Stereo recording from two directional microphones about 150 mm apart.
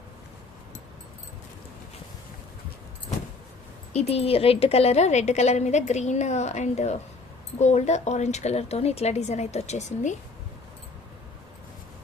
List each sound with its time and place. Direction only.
3.9 s a woman's voice: 45° left (ahead or behind)